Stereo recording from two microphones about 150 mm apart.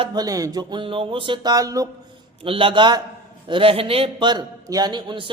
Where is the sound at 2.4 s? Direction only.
35° right (ahead or behind).